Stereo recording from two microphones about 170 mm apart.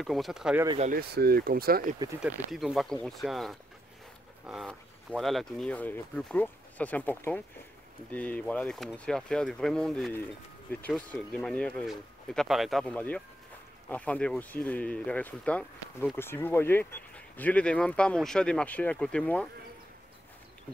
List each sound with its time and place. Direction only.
0.0 s speech: centre (ahead or behind)
0.9 s speech: 65° right (ahead or behind)
2.2 s speech: centre (ahead or behind)